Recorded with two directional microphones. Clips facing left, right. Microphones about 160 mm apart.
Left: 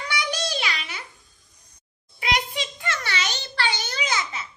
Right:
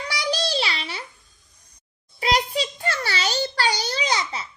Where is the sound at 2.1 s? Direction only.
35° right (ahead or behind).